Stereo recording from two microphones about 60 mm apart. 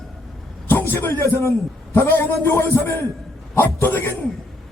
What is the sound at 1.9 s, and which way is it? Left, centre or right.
Speech, left.